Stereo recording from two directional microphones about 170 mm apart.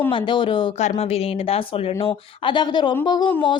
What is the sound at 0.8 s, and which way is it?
Speech, 40° left (ahead or behind).